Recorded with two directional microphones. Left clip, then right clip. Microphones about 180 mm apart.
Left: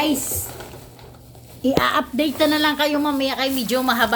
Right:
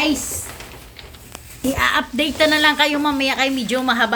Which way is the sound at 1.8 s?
10° right (ahead or behind).